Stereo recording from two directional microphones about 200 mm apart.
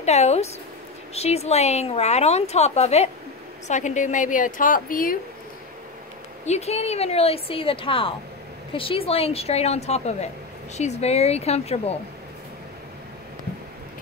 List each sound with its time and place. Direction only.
0.0 s a woman's voice: 35° left (ahead or behind)
6.4 s a woman's voice: 35° left (ahead or behind)